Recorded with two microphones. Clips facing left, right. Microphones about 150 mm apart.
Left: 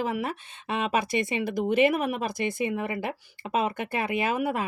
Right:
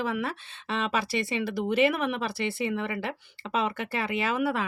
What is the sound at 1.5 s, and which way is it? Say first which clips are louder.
Speech: left 2 dB; 45° left (ahead or behind).